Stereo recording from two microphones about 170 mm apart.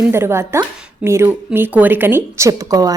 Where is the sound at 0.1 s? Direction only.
15° right (ahead or behind).